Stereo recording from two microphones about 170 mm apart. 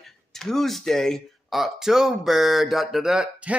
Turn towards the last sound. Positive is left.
turn(degrees=-5)  # may be behind; listen again after turning